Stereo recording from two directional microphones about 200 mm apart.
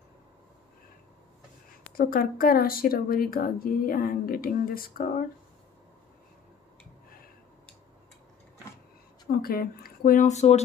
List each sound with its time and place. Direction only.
2.0 s speech: 45° left (ahead or behind)
9.3 s speech: 45° left (ahead or behind)